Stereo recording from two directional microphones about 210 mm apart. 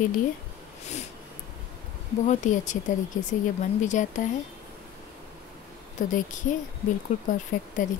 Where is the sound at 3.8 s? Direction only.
35° left (ahead or behind).